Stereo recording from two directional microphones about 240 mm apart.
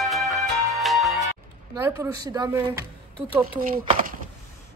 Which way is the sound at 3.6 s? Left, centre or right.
Right.